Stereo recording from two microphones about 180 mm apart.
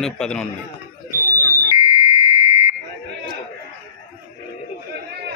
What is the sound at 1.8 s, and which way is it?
Fire alarm, 25° right (ahead or behind).